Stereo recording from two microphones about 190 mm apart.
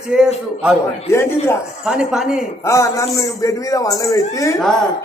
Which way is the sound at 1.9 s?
5° right (ahead or behind).